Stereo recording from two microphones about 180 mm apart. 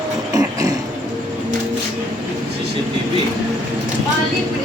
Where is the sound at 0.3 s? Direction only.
20° right (ahead or behind).